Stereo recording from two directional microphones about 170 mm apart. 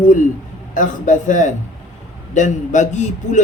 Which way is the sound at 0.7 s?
50° left (ahead or behind).